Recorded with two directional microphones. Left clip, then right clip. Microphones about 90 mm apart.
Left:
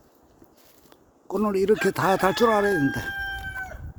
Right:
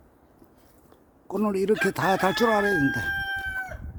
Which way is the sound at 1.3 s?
5° left (ahead or behind).